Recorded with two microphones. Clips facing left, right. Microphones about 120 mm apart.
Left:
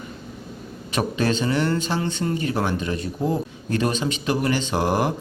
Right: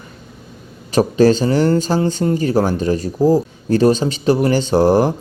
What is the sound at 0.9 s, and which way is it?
Speech, 35° right (ahead or behind).